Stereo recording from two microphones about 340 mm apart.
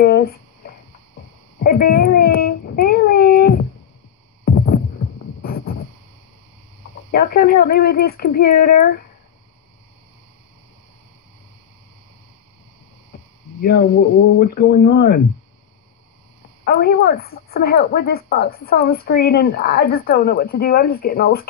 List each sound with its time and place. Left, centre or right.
0.0 s speech: left
1.6 s child singing: left
7.1 s a woman's voice: left
13.6 s a woman's voice: left
16.6 s a woman's voice: left